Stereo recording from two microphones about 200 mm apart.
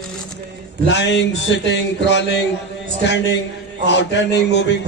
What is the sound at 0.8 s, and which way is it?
A man's voice, 65° left (ahead or behind).